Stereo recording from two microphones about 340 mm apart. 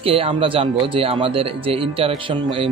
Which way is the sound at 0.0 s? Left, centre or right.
Centre.